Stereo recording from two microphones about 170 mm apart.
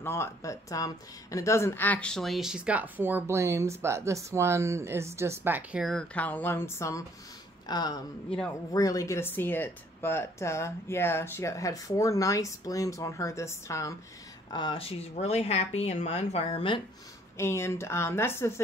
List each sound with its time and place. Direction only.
0.0 s speech: 15° left (ahead or behind)
14.5 s speech: 30° left (ahead or behind)
17.4 s speech: 15° left (ahead or behind)